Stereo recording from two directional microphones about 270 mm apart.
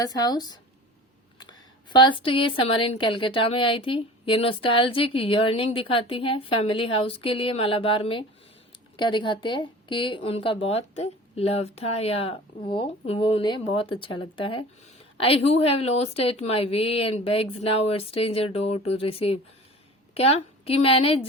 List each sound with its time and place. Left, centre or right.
0.0 s a woman's voice: centre